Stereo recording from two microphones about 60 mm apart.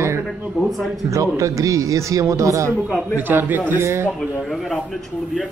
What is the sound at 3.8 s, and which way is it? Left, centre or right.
Speech, right.